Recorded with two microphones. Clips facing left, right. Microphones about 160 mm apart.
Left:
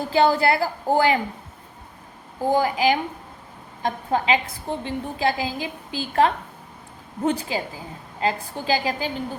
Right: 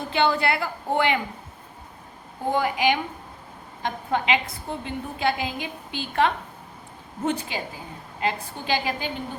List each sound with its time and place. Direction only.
0.1 s a woman's voice: 35° left (ahead or behind)
2.4 s a woman's voice: 35° left (ahead or behind)